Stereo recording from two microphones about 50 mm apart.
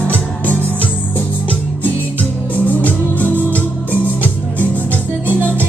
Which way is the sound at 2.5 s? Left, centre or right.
Left.